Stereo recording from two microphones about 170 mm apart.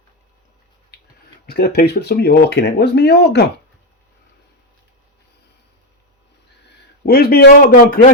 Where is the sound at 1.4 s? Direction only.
65° left (ahead or behind).